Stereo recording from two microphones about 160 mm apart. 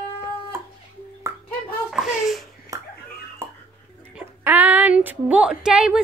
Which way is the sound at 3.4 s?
15° right (ahead or behind).